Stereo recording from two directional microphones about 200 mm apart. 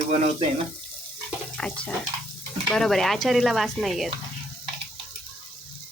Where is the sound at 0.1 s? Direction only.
30° right (ahead or behind).